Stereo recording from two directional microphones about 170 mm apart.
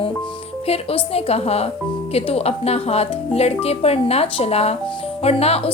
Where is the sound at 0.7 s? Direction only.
35° left (ahead or behind).